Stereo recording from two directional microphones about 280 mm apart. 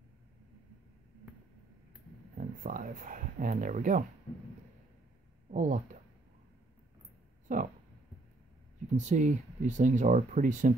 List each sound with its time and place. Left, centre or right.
2.3 s speech: right
5.5 s speech: right
7.5 s speech: right
8.9 s speech: right